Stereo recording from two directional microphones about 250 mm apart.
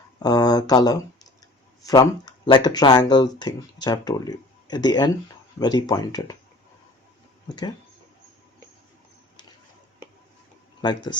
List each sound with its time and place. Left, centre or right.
0.2 s speech: centre
7.4 s speech: centre
10.8 s speech: centre